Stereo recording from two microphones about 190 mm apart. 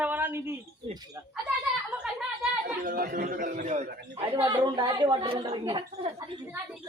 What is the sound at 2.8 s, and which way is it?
Speech, 50° right (ahead or behind).